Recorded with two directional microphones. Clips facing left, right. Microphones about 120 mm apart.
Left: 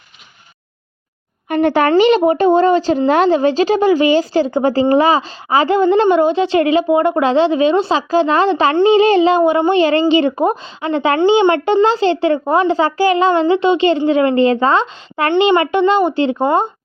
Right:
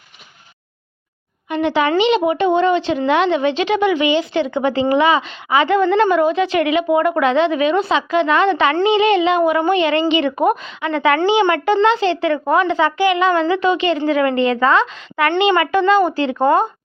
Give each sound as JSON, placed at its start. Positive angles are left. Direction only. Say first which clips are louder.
{"t": 1.5, "sound": "speech", "louder": "left 4 dB", "side_deg": 50}